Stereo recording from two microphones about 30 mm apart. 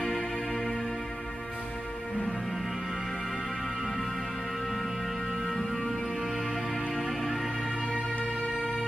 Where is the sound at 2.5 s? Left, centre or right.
Centre.